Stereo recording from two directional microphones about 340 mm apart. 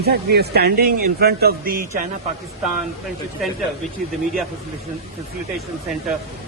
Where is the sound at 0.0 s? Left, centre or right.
Right.